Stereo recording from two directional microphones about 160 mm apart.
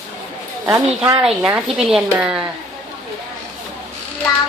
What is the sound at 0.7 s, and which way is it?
Speech, 20° right (ahead or behind).